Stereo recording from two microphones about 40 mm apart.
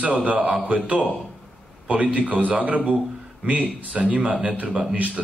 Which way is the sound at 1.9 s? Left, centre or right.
Right.